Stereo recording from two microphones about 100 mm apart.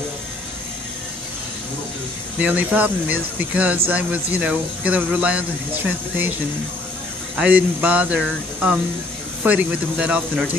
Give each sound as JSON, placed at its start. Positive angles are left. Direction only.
{"t": 2.4, "sound": "speech", "side_deg": -15}
{"t": 7.3, "sound": "speech", "side_deg": -15}